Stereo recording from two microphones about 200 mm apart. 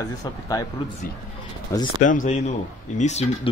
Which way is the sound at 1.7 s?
15° left (ahead or behind).